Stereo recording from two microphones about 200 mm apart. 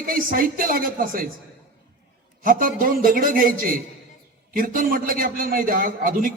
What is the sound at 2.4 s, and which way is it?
A man's voice, 45° right (ahead or behind).